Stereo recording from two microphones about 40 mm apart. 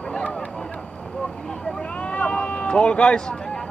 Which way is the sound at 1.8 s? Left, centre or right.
Left.